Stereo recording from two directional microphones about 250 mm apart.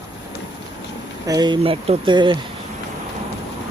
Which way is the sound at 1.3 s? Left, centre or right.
Centre.